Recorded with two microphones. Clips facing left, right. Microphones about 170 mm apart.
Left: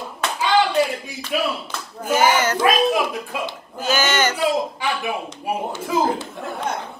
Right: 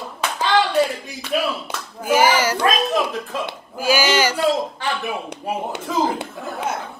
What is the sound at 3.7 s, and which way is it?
Speech, 10° right (ahead or behind).